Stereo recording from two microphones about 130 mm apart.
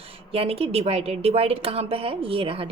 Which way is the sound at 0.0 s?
50° right (ahead or behind).